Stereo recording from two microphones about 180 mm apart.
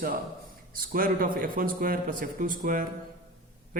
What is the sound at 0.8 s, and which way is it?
A man's voice, 50° right (ahead or behind).